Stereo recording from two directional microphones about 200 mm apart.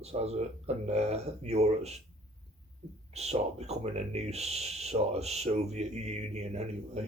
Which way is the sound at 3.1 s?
30° right (ahead or behind).